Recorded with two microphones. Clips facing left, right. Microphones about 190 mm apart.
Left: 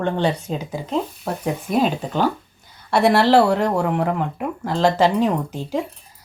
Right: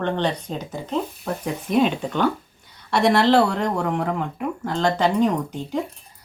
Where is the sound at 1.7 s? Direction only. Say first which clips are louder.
Right 1 dB; 40° left (ahead or behind).